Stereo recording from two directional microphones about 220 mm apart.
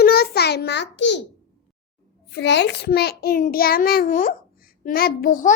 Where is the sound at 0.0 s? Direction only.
45° left (ahead or behind).